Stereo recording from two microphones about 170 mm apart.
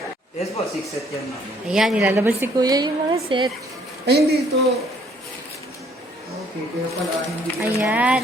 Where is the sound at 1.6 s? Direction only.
5° right (ahead or behind).